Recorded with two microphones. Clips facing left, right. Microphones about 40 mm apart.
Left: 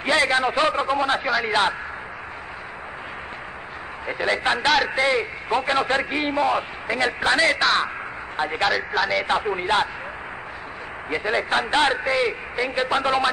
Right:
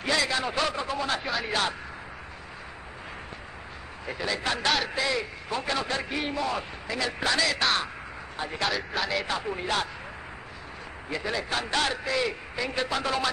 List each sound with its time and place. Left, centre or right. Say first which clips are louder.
0.0 s a man's voice: left 7 dB; left
1.2 s speech: left 8 dB; centre
1.5 s a man's voice: left 6 dB; left
4.1 s a man's voice: left 7 dB; left
8.6 s speech: left 6 dB; centre
9.3 s a man's voice: left 8 dB; left
11.1 s a man's voice: left 7 dB; left